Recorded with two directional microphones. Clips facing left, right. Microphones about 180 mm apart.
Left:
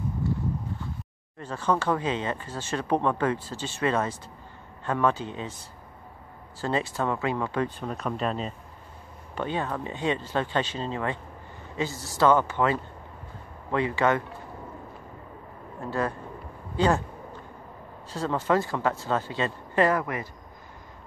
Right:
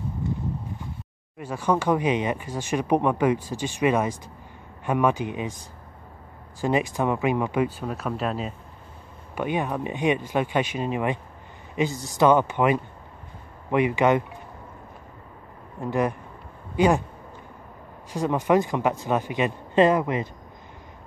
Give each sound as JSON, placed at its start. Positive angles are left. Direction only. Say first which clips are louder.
{"t": 0.2, "sound": "a sound", "louder": "even", "side_deg": -20}
{"t": 1.4, "sound": "speech", "louder": "right 2 dB", "side_deg": -10}
{"t": 6.6, "sound": "speech", "louder": "right 4 dB", "side_deg": -15}
{"t": 15.8, "sound": "speech", "louder": "right 4 dB", "side_deg": -15}
{"t": 18.1, "sound": "speech", "louder": "right 4 dB", "side_deg": -15}